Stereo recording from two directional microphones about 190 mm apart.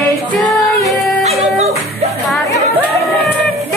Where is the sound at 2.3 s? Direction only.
Centre (ahead or behind).